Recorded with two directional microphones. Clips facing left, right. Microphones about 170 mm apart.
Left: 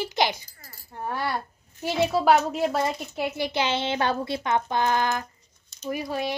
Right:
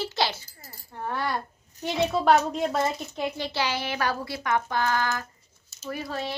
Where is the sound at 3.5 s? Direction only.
20° left (ahead or behind).